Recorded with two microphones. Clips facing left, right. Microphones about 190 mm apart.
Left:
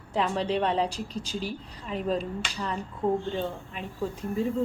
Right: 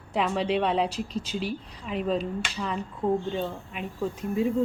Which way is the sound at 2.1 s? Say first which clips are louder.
Right 1 dB; centre (ahead or behind).